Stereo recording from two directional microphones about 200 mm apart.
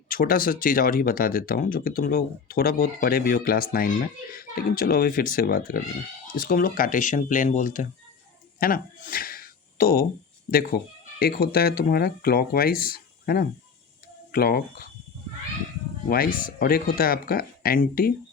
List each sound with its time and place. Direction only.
0.1 s speech: 45° left (ahead or behind)
16.0 s speech: 50° left (ahead or behind)